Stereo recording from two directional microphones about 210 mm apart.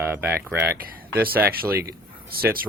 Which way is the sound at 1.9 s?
45° right (ahead or behind).